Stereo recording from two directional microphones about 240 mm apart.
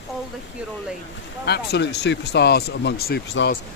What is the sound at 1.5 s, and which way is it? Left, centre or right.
Speech, left.